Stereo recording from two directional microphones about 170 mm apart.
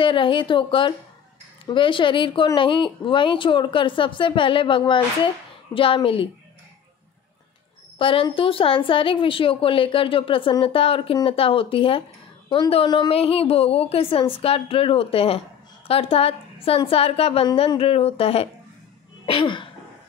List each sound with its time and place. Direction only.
0.0 s a woman's voice: 30° left (ahead or behind)
8.0 s a woman's voice: 30° left (ahead or behind)